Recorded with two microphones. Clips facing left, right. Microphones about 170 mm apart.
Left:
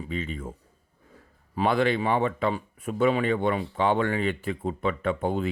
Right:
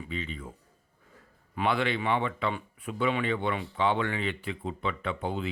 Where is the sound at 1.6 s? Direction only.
40° left (ahead or behind).